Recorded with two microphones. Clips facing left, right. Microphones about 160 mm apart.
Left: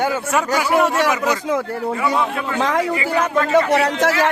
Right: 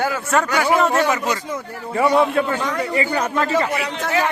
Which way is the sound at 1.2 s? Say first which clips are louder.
Left 5 dB; 90° left.